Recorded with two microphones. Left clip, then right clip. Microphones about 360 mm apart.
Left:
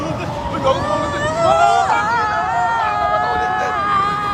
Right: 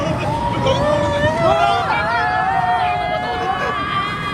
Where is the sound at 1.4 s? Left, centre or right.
Centre.